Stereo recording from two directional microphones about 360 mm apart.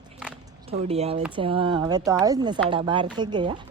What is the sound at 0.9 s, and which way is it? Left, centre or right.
Speech, centre.